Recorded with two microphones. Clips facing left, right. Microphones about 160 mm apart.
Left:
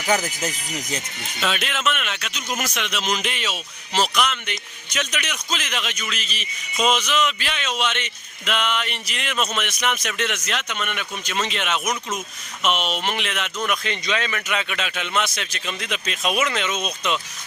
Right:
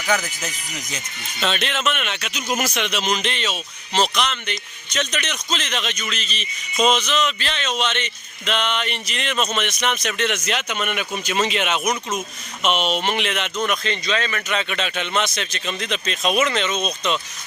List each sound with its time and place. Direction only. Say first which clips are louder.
0.1 s speech: left 1 dB; 35° left (ahead or behind)
1.4 s speech: right 2 dB; 5° left (ahead or behind)
13.7 s a man's voice: right 2 dB; 10° left (ahead or behind)